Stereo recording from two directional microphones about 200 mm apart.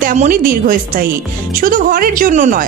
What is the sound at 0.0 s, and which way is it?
A woman's voice, 40° right (ahead or behind).